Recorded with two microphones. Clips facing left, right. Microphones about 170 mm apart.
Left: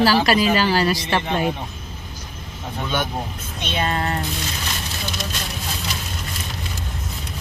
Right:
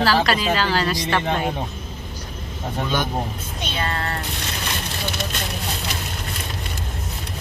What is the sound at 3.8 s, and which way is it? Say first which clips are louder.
Speech: left 4 dB; 15° left (ahead or behind).